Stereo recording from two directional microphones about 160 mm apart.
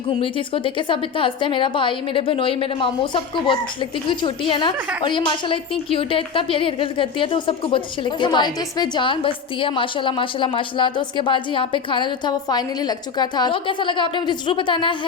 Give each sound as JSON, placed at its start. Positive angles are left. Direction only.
{"t": 0.2, "sound": "a woman's voice", "side_deg": 35}